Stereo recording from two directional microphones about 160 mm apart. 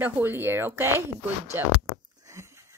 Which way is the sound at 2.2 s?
15° right (ahead or behind).